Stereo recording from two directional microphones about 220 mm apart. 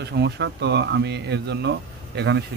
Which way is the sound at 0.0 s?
50° right (ahead or behind).